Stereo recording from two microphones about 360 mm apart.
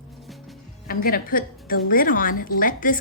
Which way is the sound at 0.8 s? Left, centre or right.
Left.